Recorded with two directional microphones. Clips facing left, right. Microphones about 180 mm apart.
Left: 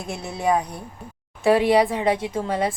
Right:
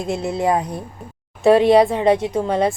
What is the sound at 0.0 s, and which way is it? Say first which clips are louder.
A woman's voice: right 5 dB; 20° right (ahead or behind).